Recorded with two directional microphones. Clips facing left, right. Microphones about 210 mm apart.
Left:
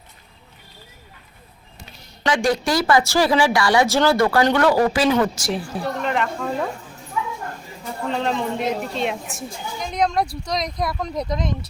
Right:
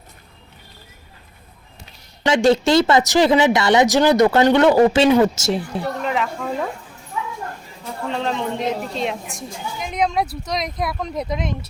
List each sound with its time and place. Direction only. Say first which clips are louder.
2.2 s a woman's voice: right 5 dB; 25° right (ahead or behind)
5.8 s a woman's voice: even; centre (ahead or behind)
7.9 s a woman's voice: even; centre (ahead or behind)
9.8 s a sound: even; 5° right (ahead or behind)
10.4 s a woman's voice: even; 5° right (ahead or behind)